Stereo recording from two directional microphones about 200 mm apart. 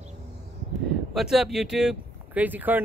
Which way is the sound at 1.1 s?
Centre (ahead or behind).